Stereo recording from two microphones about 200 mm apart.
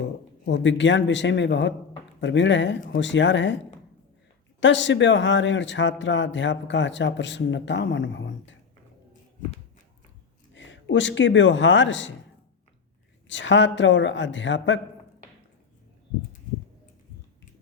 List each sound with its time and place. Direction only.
0.0 s speech: 65° left (ahead or behind)
4.6 s speech: 65° left (ahead or behind)
10.5 s speech: 65° left (ahead or behind)
13.2 s speech: 65° left (ahead or behind)